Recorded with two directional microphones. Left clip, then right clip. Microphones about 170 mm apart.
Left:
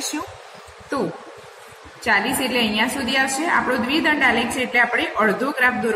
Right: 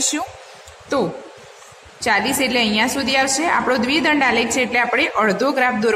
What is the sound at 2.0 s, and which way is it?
A woman's voice, 75° right (ahead or behind).